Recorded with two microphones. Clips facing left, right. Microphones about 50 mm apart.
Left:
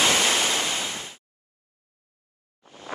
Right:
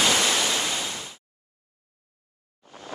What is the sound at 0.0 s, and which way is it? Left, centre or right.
Waves, left.